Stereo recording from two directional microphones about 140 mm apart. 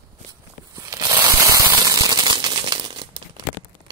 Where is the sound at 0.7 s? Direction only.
25° right (ahead or behind).